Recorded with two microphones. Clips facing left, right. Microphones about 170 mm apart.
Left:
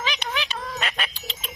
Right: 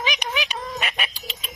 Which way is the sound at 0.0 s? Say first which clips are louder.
Right 2 dB; 15° right (ahead or behind).